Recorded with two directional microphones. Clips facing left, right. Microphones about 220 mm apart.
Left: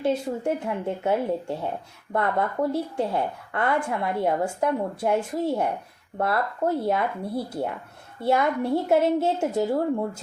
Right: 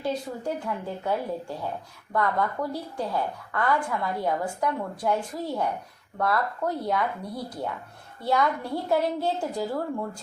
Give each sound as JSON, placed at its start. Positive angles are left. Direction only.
{"t": 0.0, "sound": "a woman's voice", "side_deg": 25}